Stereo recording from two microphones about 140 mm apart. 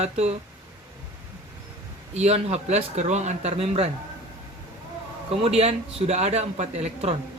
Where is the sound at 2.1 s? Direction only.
50° right (ahead or behind).